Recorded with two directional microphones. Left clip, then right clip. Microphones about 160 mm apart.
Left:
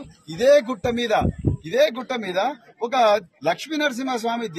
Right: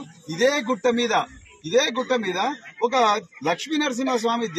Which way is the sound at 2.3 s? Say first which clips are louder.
Left 1 dB; 30° left (ahead or behind).